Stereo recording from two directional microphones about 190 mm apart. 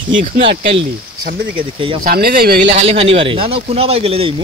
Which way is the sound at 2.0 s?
50° right (ahead or behind).